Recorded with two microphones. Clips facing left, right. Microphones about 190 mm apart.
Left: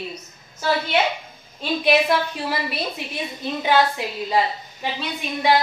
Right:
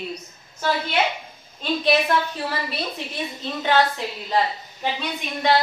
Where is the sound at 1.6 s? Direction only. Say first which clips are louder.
Left 1 dB; 10° left (ahead or behind).